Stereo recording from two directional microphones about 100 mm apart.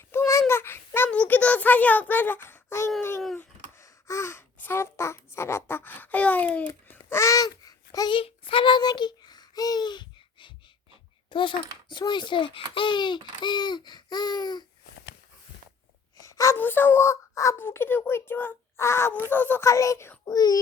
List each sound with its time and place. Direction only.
0.1 s child singing: 25° left (ahead or behind)
1.1 s a sound: 10° left (ahead or behind)
7.1 s babbling: 30° left (ahead or behind)
8.1 s child singing: 65° left (ahead or behind); by 10.5 s 50° left (ahead or behind)
11.3 s a child's voice: 55° left (ahead or behind)
16.1 s a sound: 35° left (ahead or behind)
16.6 s a child's voice: 20° left (ahead or behind)
19.6 s speech: 30° left (ahead or behind)
20.3 s speech: 40° left (ahead or behind)